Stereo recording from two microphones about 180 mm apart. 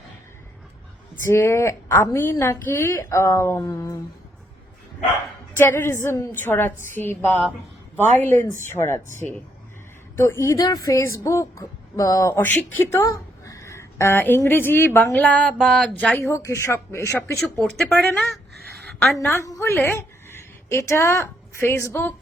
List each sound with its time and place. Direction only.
1.2 s a woman's voice: 15° left (ahead or behind)
5.5 s a woman's voice: 15° left (ahead or behind)
10.4 s a woman's voice: 20° left (ahead or behind)
17.3 s speech: centre (ahead or behind)
18.9 s a sound: centre (ahead or behind)
19.2 s a woman's voice: 15° left (ahead or behind)